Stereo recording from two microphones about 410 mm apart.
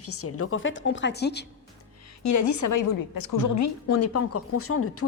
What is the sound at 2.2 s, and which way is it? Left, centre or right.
A woman's voice, left.